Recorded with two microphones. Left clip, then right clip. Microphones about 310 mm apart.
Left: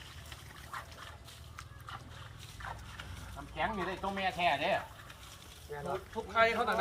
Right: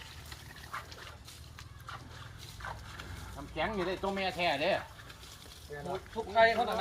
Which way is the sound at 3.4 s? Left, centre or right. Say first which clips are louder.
Right 1 dB; right.